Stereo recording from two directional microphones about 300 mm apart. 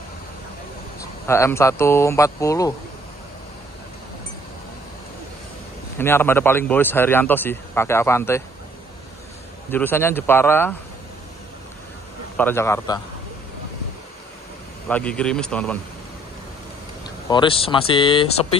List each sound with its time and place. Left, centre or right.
1.2 s speech: centre
5.9 s speech: centre
9.7 s speech: centre
12.4 s speech: centre
14.9 s a man's voice: centre
17.0 s speech: centre